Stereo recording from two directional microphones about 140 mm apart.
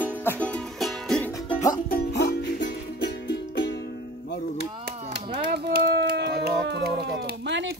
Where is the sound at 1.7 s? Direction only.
90° left.